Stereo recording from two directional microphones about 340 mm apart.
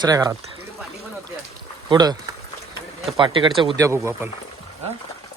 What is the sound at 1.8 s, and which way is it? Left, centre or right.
Speech, centre.